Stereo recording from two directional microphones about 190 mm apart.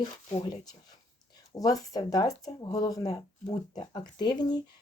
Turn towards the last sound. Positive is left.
turn(degrees=20)  # may be behind; listen again after turning